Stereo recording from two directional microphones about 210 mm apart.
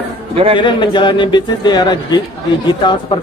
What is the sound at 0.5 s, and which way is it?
Speech, 20° left (ahead or behind).